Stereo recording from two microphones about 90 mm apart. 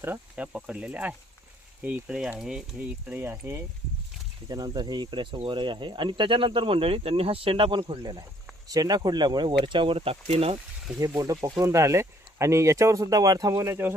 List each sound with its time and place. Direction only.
0.3 s speech: 10° right (ahead or behind); by 3.6 s 30° right (ahead or behind)
4.4 s speech: 45° right (ahead or behind); by 7.9 s 65° right (ahead or behind)
8.6 s speech: 45° right (ahead or behind); by 10.6 s 90° right
11.0 s speech: 40° right (ahead or behind)